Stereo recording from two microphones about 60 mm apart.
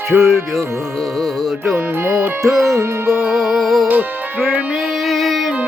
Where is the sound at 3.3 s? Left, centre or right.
Centre.